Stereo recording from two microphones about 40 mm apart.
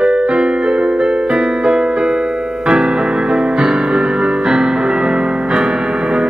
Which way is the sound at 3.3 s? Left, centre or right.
Centre.